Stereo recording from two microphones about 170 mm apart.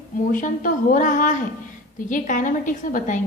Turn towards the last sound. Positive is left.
turn(degrees=50)  # may be behind; listen again after turning